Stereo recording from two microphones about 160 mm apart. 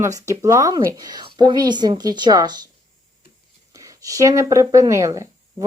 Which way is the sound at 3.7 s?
20° right (ahead or behind).